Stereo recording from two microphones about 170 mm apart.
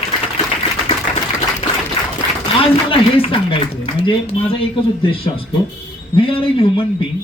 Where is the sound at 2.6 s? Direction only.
35° left (ahead or behind).